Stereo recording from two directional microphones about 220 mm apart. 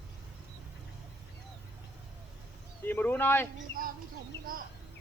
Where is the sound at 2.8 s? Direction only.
10° left (ahead or behind).